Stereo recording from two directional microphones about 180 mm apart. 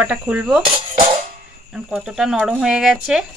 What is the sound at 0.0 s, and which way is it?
Speech, 5° right (ahead or behind).